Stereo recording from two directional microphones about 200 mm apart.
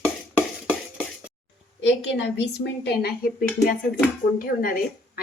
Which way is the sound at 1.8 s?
60° left (ahead or behind).